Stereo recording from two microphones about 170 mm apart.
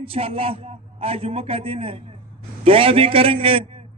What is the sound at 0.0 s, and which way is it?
Speech, 35° right (ahead or behind).